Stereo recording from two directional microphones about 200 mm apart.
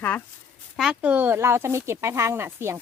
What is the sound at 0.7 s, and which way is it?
Speech, 5° right (ahead or behind).